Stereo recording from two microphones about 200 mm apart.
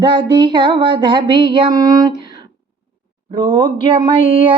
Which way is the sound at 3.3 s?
25° right (ahead or behind).